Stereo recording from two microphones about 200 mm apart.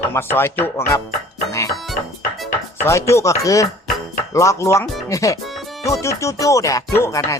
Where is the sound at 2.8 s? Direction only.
15° left (ahead or behind).